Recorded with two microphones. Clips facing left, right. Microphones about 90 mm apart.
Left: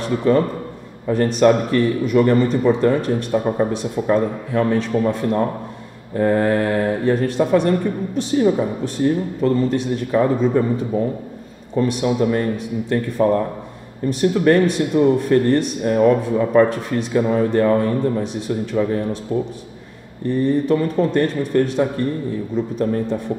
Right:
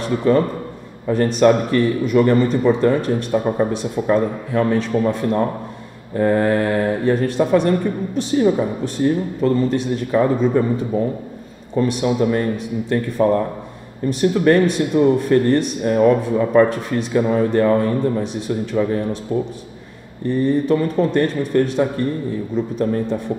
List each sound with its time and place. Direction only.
0.0 s speech: 20° right (ahead or behind)
11.9 s speech: 15° right (ahead or behind)
20.4 s speech: 20° right (ahead or behind)